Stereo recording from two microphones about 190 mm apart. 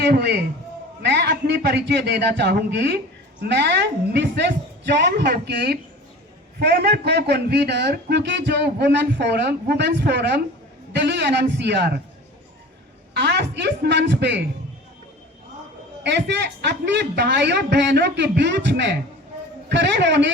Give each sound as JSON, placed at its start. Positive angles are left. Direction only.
{"t": 0.0, "sound": "a man's voice", "side_deg": -60}
{"t": 13.1, "sound": "a man's voice", "side_deg": -60}
{"t": 16.0, "sound": "a man's voice", "side_deg": -65}